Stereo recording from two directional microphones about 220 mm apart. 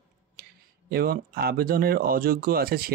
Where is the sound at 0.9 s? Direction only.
45° right (ahead or behind).